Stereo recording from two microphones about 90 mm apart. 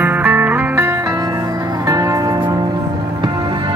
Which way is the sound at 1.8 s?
40° right (ahead or behind).